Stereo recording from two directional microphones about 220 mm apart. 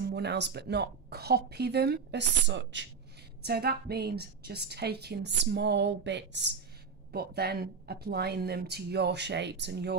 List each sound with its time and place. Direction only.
0.0 s a woman's voice: 50° right (ahead or behind)